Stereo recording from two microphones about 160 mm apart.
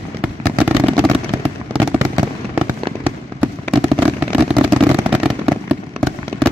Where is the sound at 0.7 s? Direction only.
40° right (ahead or behind).